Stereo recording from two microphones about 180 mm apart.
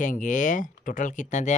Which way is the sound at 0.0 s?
45° left (ahead or behind).